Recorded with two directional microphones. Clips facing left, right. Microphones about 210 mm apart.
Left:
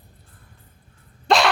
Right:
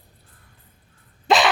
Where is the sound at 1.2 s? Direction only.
Centre (ahead or behind).